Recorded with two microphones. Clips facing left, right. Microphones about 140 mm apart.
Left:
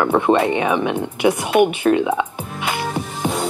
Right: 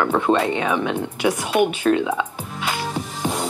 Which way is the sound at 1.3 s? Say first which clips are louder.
Left 4 dB; 55° left (ahead or behind).